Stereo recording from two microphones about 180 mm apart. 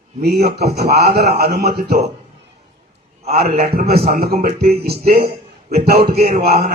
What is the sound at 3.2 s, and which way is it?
A man's voice, 55° right (ahead or behind).